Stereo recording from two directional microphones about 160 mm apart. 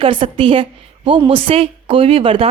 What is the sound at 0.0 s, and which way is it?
A woman's voice, 35° right (ahead or behind).